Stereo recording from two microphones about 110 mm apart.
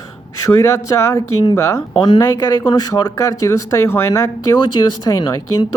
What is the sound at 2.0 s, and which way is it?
Speech, 35° left (ahead or behind).